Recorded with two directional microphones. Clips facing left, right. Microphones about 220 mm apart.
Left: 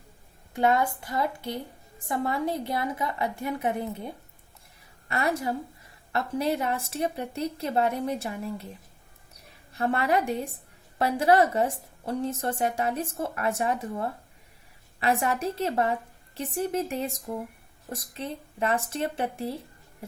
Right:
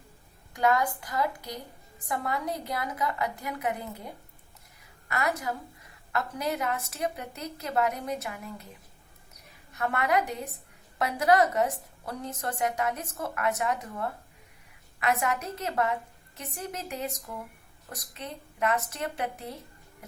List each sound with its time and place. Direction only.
0.5 s a woman's voice: 25° left (ahead or behind)
9.7 s a woman's voice: 30° left (ahead or behind)